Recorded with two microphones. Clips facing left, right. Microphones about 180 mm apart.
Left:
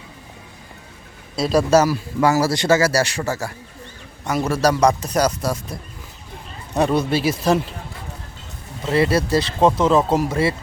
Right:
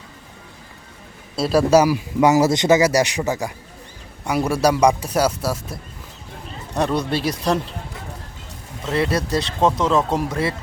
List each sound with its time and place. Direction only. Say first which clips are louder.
1.4 s a man's voice: right 1 dB; 5° right (ahead or behind)
8.8 s speech: left 3 dB; centre (ahead or behind)